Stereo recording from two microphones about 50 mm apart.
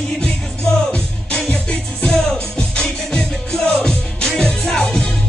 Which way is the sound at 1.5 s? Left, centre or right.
Left.